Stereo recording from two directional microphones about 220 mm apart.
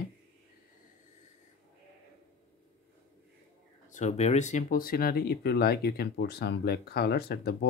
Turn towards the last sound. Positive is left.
turn(degrees=45)  # may be behind; listen again after turning